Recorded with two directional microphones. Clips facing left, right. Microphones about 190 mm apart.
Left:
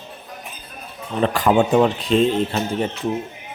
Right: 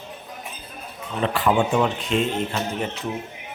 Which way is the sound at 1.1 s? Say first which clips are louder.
Left 4 dB; 40° left (ahead or behind).